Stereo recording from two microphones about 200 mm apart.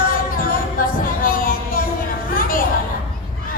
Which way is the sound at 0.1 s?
45° left (ahead or behind).